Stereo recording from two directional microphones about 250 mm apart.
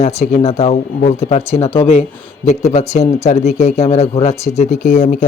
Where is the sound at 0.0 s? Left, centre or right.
Left.